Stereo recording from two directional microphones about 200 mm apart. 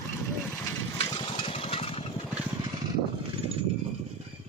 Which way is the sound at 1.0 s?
25° left (ahead or behind).